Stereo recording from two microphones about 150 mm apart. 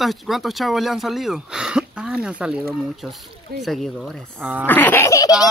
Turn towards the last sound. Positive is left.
turn(degrees=20)  # may be behind; listen again after turning